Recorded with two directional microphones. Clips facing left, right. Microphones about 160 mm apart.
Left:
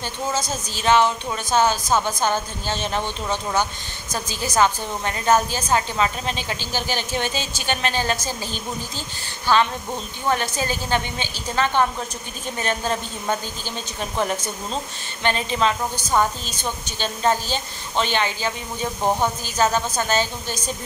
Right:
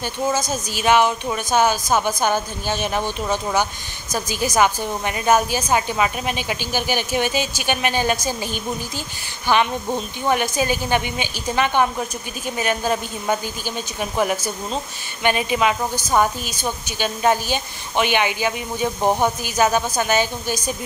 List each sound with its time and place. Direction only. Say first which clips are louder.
0.3 s a woman's voice: right 3 dB; 10° right (ahead or behind)